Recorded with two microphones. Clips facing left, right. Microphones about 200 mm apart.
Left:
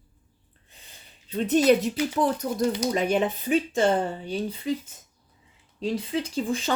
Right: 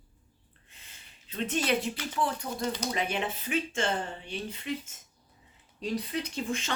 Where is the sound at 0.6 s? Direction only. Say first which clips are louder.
Left 5 dB; 35° left (ahead or behind).